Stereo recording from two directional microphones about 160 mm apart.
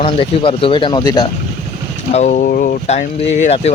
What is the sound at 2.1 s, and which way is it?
Speech, 45° left (ahead or behind).